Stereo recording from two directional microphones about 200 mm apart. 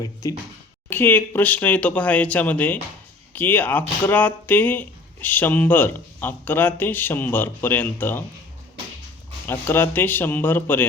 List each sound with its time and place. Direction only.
0.0 s speech: 20° left (ahead or behind)
9.5 s speech: 10° left (ahead or behind)